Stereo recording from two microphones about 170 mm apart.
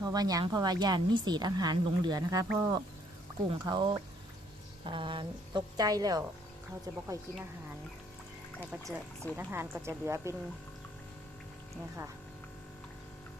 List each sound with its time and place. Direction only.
0.0 s a woman's voice: 25° right (ahead or behind)
8.7 s speech: centre (ahead or behind)
9.3 s speech: 15° right (ahead or behind)